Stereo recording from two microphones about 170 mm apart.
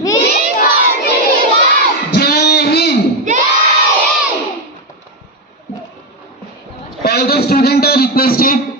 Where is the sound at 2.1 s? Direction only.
70° left (ahead or behind).